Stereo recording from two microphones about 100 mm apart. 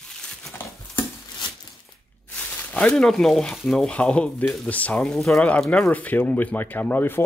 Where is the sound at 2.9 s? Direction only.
5° left (ahead or behind).